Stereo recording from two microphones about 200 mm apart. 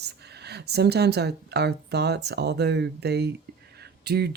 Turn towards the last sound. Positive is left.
turn(degrees=-55)  # may be behind; listen again after turning